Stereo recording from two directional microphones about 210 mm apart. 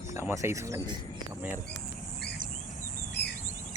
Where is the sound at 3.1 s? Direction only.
50° left (ahead or behind).